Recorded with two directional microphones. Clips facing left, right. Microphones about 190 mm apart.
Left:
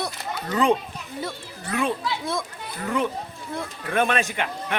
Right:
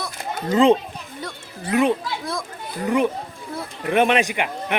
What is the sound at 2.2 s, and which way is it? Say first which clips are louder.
Speech: even; centre (ahead or behind).